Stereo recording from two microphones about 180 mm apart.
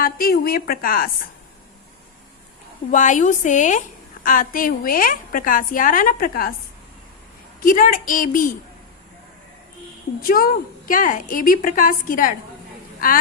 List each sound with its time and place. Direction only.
0.0 s a woman's voice: 55° left (ahead or behind)
2.9 s a woman's voice: 45° left (ahead or behind)
7.6 s a woman's voice: 50° left (ahead or behind)
10.2 s a woman's voice: 55° left (ahead or behind)